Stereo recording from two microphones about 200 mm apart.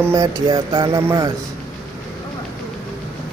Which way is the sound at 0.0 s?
15° right (ahead or behind).